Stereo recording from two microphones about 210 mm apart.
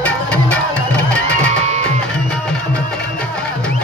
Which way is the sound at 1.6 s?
35° right (ahead or behind).